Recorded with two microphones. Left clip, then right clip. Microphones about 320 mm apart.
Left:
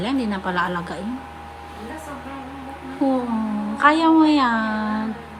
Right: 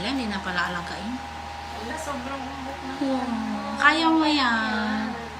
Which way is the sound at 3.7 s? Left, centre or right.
Centre.